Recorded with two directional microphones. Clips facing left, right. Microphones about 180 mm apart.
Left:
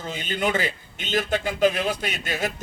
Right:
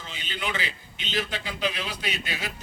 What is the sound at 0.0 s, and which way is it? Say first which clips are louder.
A man's voice: left 8 dB; 45° left (ahead or behind).